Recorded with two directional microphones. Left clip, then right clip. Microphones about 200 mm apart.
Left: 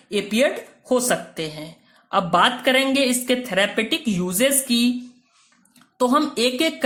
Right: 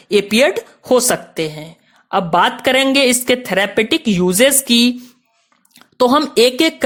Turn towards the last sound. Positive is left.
turn(degrees=-40)  # may be behind; listen again after turning